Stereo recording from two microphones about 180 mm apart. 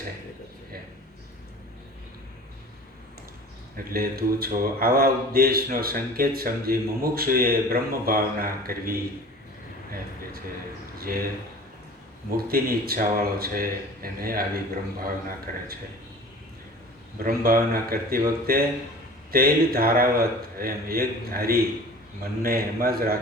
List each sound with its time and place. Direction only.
3.8 s speech: 55° right (ahead or behind)
10.9 s speech: 55° right (ahead or behind)
12.4 s speech: 55° right (ahead or behind)
17.2 s speech: 55° right (ahead or behind)